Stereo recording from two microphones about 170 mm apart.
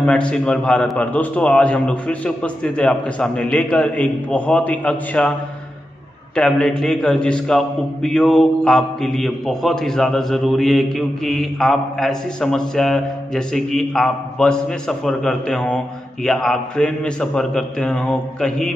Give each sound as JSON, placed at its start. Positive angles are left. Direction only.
{"t": 0.0, "sound": "a man's voice", "side_deg": 5}
{"t": 6.3, "sound": "a man's voice", "side_deg": 5}